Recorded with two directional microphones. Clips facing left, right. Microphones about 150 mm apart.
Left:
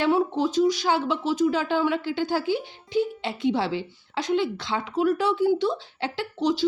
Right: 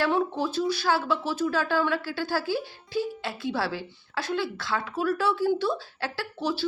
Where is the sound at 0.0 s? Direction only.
15° left (ahead or behind).